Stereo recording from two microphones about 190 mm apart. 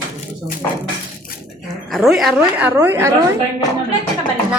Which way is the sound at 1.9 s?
Centre (ahead or behind).